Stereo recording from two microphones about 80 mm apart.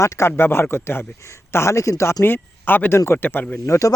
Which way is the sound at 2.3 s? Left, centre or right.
Left.